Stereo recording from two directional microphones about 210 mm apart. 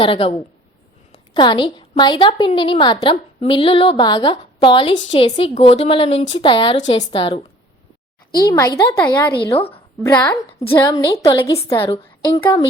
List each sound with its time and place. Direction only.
0.0 s a woman's voice: 25° left (ahead or behind)
8.4 s a woman's voice: 15° left (ahead or behind)
9.5 s a woman's voice: 25° left (ahead or behind)
10.0 s a woman's voice: 15° left (ahead or behind)